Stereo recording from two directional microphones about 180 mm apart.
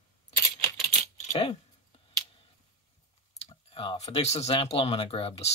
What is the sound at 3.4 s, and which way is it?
Speech, 30° left (ahead or behind).